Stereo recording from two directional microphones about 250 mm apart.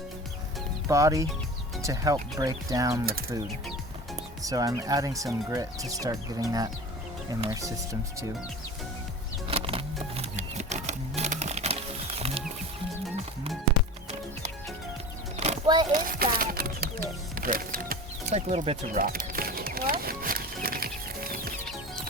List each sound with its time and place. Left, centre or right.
0.9 s speech: centre
4.4 s speech: centre
9.5 s typewriter: right
15.4 s a sound: right
15.9 s music: right
17.3 s a sound: right